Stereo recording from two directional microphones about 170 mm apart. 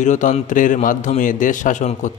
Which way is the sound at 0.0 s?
45° left (ahead or behind).